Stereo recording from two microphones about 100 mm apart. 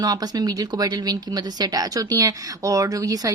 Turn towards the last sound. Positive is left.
turn(degrees=-35)  # may be behind; listen again after turning